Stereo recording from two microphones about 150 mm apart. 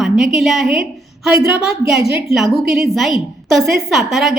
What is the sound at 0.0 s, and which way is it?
Speech, centre (ahead or behind).